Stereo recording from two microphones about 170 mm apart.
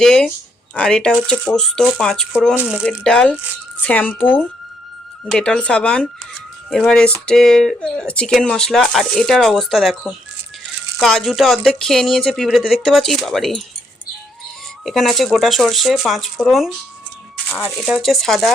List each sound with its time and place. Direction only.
0.0 s speech: 5° left (ahead or behind)
2.8 s speech: 5° left (ahead or behind)
14.8 s speech: centre (ahead or behind)
17.7 s speech: centre (ahead or behind)